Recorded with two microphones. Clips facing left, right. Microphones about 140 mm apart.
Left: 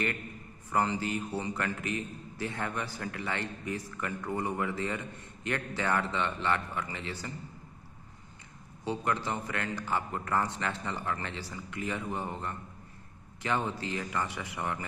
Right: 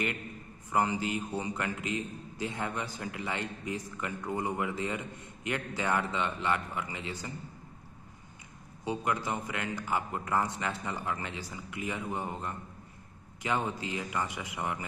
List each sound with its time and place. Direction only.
0.7 s a man's voice: 15° right (ahead or behind)
8.8 s a man's voice: 15° right (ahead or behind)